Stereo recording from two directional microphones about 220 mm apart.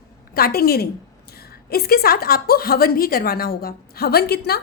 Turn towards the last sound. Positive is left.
turn(degrees=45)  # may be behind; listen again after turning